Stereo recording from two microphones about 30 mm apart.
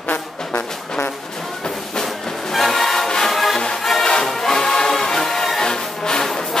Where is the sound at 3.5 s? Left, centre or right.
Centre.